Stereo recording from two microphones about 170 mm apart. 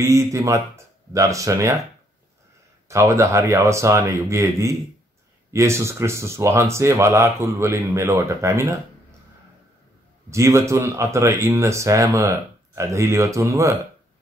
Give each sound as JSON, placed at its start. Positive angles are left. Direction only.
{"t": 0.3, "sound": "speech", "side_deg": -20}
{"t": 2.9, "sound": "speech", "side_deg": -15}
{"t": 10.3, "sound": "speech", "side_deg": -15}